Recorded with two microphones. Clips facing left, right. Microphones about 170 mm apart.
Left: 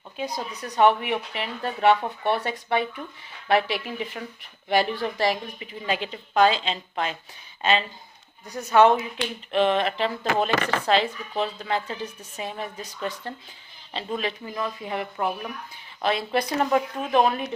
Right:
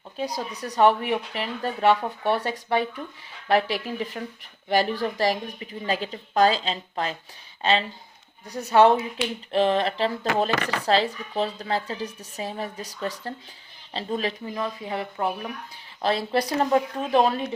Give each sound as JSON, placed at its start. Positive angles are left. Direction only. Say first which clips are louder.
{"t": 0.2, "sound": "speech", "louder": "right 1 dB", "side_deg": -40}